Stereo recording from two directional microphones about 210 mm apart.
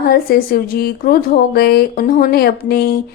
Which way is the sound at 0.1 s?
45° left (ahead or behind).